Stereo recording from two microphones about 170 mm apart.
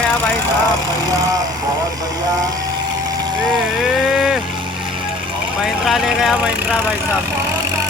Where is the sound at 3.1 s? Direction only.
25° right (ahead or behind).